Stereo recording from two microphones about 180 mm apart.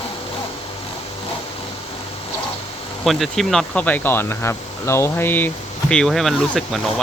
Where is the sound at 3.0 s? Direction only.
Centre (ahead or behind).